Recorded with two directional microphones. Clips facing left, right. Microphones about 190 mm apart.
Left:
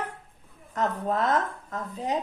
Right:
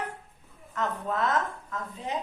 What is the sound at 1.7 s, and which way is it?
Speech, 40° left (ahead or behind).